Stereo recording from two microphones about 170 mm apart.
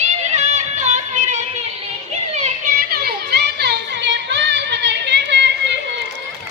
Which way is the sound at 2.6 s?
65° right (ahead or behind).